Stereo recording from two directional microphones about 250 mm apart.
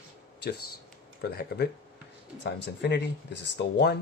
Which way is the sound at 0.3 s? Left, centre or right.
Left.